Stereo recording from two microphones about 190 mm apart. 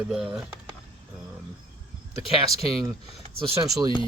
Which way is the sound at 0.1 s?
5° right (ahead or behind).